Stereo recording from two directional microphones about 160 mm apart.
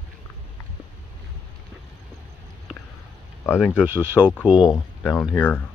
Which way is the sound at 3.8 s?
15° right (ahead or behind).